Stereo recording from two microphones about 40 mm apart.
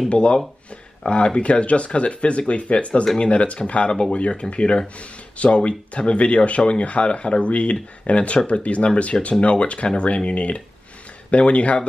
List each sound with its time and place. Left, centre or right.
0.1 s speech: left